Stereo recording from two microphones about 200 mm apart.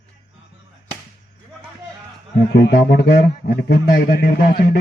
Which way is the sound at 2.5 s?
55° left (ahead or behind).